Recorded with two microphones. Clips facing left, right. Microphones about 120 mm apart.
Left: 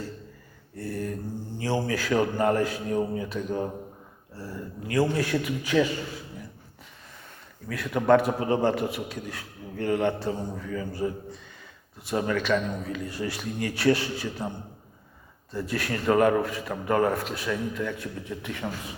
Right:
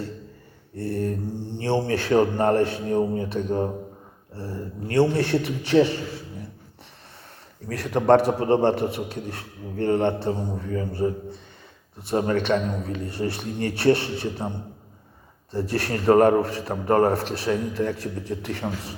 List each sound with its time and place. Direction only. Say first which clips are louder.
0.8 s a sound: right 5 dB; 25° right (ahead or behind)
1.5 s a man's voice: right 4 dB; 25° right (ahead or behind)
7.7 s a man's voice: right 3 dB; 35° right (ahead or behind)
12.1 s a man's voice: right 3 dB; 35° right (ahead or behind)
15.5 s a man's voice: right 4 dB; 30° right (ahead or behind)